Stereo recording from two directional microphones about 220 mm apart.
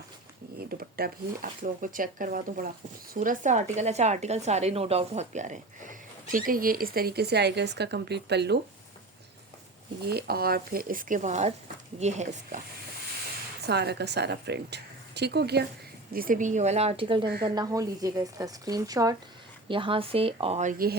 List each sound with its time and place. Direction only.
0.6 s a woman's voice: 45° right (ahead or behind)
10.0 s a woman's voice: 45° right (ahead or behind)
13.6 s a woman's voice: 50° right (ahead or behind)